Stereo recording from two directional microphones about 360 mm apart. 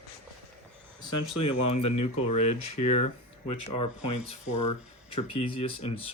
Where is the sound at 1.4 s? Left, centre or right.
Left.